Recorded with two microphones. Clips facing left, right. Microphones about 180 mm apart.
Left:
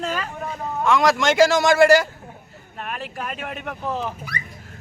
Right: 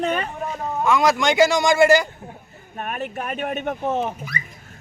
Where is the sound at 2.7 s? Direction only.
30° right (ahead or behind).